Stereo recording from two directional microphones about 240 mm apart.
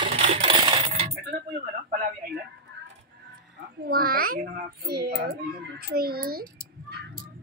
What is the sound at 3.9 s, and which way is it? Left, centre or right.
A child's voice, right.